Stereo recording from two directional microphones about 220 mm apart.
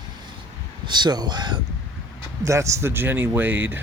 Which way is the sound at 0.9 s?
20° right (ahead or behind).